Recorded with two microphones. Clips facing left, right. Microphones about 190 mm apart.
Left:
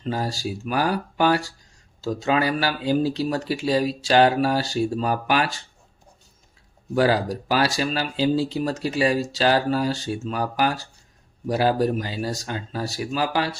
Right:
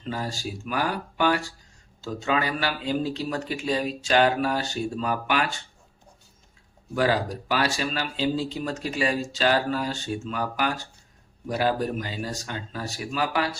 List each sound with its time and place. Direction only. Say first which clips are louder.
0.0 s speech: left 4 dB; 35° left (ahead or behind)
6.9 s speech: left 4 dB; 35° left (ahead or behind)